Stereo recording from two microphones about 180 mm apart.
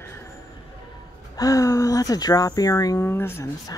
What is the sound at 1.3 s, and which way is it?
Speech, 20° left (ahead or behind).